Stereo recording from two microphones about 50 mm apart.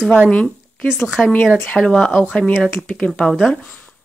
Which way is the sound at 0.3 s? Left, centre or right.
Left.